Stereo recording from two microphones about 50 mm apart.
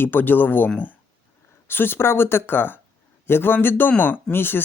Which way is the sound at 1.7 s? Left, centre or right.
Left.